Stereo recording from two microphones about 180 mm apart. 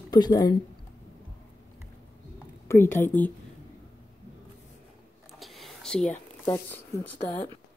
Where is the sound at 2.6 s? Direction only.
15° left (ahead or behind).